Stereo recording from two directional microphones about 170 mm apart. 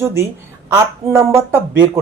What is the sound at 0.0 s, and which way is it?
Speech, 15° right (ahead or behind).